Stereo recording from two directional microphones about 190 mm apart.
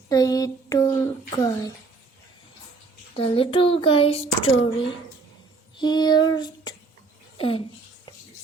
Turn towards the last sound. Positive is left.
turn(degrees=30)  # may be behind; listen again after turning